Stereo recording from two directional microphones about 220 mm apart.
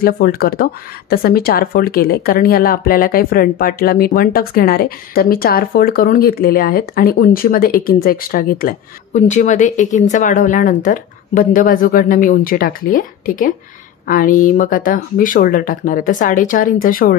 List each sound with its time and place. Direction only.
0.0 s speech: 40° left (ahead or behind)